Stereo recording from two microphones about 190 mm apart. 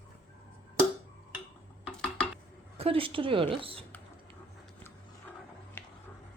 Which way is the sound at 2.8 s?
30° right (ahead or behind).